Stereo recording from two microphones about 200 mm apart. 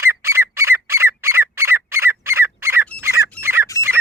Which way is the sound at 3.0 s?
10° right (ahead or behind).